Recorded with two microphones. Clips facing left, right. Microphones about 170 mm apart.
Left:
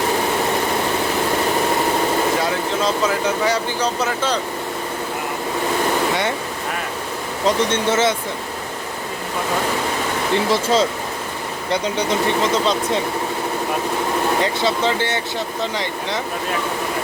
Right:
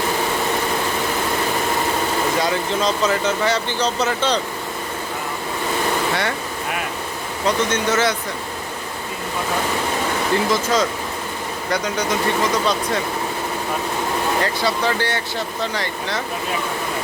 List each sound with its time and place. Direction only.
2.4 s speech: 5° left (ahead or behind)
7.4 s speech: 25° left (ahead or behind)
10.5 s speech: 30° left (ahead or behind)
14.4 s speech: 20° left (ahead or behind)